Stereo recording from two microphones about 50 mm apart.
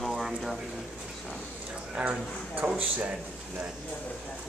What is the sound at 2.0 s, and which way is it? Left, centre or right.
Speech, right.